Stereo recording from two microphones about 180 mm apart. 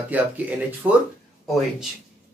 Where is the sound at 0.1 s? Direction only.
10° right (ahead or behind).